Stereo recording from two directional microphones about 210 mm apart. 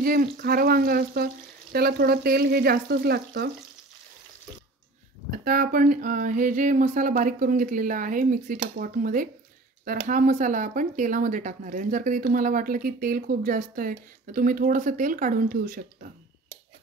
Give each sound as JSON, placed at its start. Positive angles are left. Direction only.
{"t": 0.0, "sound": "speech", "side_deg": -45}
{"t": 5.3, "sound": "speech", "side_deg": -45}